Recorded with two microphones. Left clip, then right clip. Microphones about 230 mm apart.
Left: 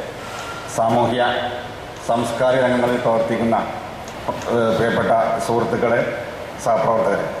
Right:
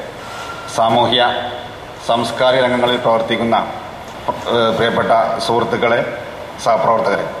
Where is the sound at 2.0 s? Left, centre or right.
Centre.